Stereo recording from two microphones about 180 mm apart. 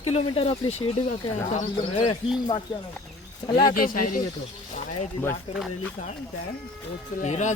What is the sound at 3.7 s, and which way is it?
Speech, 50° left (ahead or behind).